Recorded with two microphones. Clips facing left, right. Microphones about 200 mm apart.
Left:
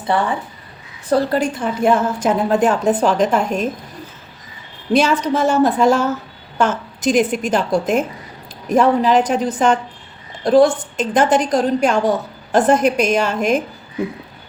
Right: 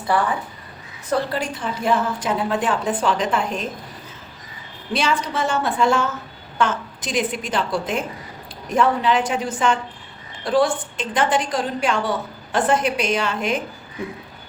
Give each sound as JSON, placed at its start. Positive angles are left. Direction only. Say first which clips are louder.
{"t": 0.0, "sound": "speech", "louder": "left 2 dB", "side_deg": 25}
{"t": 1.1, "sound": "a woman's voice", "louder": "left 6 dB", "side_deg": 45}
{"t": 4.9, "sound": "a woman's voice", "louder": "left 7 dB", "side_deg": 45}